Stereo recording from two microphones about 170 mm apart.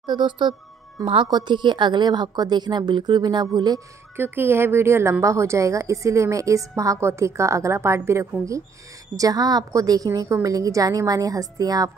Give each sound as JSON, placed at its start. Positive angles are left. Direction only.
{"t": 0.0, "sound": "speech", "side_deg": -25}
{"t": 4.2, "sound": "a woman's voice", "side_deg": -15}